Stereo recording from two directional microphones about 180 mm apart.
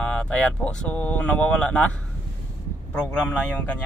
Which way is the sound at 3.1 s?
10° left (ahead or behind).